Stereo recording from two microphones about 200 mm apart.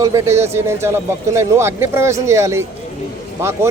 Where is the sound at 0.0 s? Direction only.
15° right (ahead or behind).